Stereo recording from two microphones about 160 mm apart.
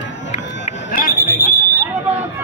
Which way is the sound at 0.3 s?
55° left (ahead or behind).